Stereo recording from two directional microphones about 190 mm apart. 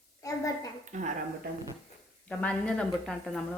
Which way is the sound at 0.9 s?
40° right (ahead or behind).